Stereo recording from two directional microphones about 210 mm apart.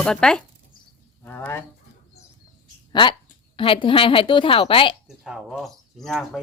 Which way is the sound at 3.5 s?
25° left (ahead or behind).